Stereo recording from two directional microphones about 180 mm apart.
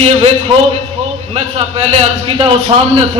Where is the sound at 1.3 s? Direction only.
35° right (ahead or behind).